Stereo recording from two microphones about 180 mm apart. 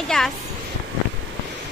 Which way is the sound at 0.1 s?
5° left (ahead or behind).